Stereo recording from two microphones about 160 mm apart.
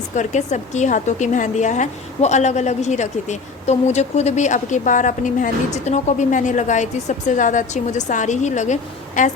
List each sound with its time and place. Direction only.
0.2 s a woman's voice: 50° left (ahead or behind)